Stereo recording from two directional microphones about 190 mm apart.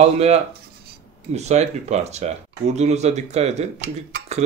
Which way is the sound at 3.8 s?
55° right (ahead or behind).